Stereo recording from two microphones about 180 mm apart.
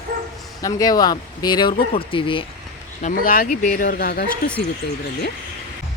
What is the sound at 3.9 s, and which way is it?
Speech, 60° left (ahead or behind).